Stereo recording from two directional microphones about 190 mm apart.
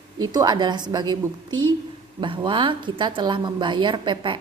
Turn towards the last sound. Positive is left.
turn(degrees=-25)  # may be behind; listen again after turning